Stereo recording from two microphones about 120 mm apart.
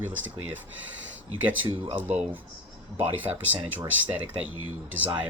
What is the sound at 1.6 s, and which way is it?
Speech, 50° right (ahead or behind).